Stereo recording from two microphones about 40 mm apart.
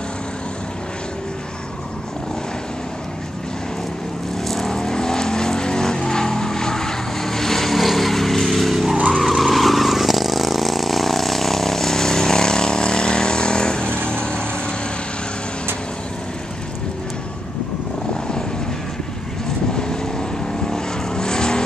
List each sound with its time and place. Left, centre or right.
4.5 s vehicle: centre; by 14.8 s left
19.7 s vehicle: centre